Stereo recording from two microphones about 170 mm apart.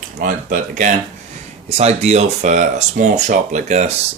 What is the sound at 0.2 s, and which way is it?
Speech, 50° right (ahead or behind).